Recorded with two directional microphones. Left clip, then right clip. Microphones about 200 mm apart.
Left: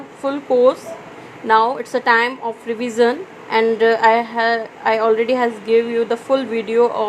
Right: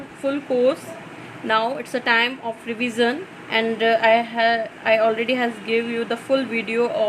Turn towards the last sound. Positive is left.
turn(degrees=10)  # may be behind; listen again after turning